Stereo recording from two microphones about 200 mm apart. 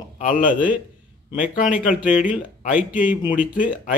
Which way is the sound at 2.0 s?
5° right (ahead or behind).